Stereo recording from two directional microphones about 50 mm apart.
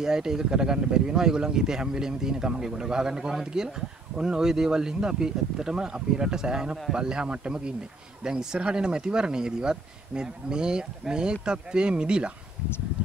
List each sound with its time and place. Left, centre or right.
0.0 s speech: centre